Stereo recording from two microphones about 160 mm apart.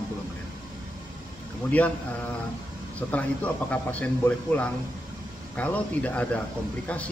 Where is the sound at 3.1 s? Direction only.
10° left (ahead or behind).